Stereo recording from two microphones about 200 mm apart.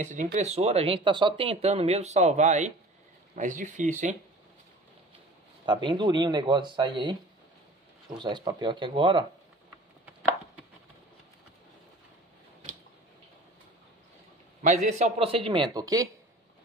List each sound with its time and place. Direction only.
0.0 s speech: 40° right (ahead or behind)
5.7 s speech: 25° right (ahead or behind)
8.2 s speech: 20° right (ahead or behind)
14.6 s speech: 40° right (ahead or behind); by 16.1 s 15° right (ahead or behind)